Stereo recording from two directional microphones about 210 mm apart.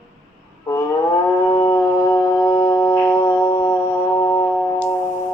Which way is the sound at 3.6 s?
10° left (ahead or behind).